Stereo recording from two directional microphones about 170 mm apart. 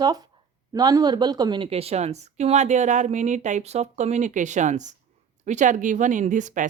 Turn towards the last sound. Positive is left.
turn(degrees=-45)  # may be behind; listen again after turning